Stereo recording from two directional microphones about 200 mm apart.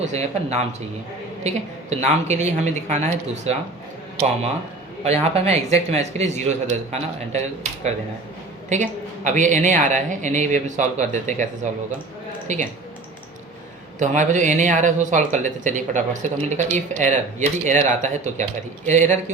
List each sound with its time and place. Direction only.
0.1 s speech: 35° right (ahead or behind)
5.0 s speech: 30° right (ahead or behind)
8.7 s speech: 35° right (ahead or behind)
14.0 s speech: 35° right (ahead or behind)